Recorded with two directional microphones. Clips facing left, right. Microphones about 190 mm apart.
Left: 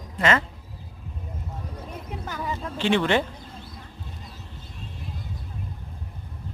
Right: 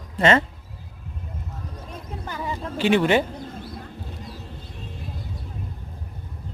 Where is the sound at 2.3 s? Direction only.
10° right (ahead or behind).